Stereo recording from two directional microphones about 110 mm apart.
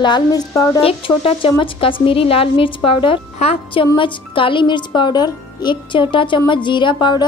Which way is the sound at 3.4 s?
80° left.